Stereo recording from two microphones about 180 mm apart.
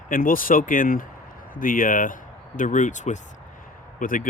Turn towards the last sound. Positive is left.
turn(degrees=50)  # may be behind; listen again after turning